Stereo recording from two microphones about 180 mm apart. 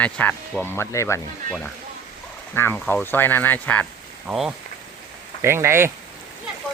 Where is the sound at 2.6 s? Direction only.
10° left (ahead or behind).